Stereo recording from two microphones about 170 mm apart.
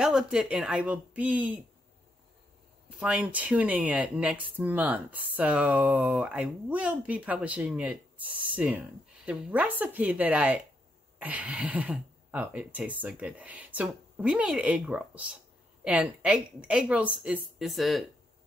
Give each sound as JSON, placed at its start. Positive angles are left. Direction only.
{"t": 0.0, "sound": "speech", "side_deg": -5}
{"t": 3.0, "sound": "speech", "side_deg": -5}